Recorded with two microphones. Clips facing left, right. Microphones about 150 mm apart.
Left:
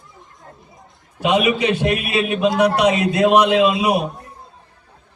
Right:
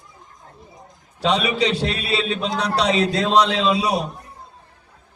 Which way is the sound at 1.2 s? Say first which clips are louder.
Left 3 dB; 15° left (ahead or behind).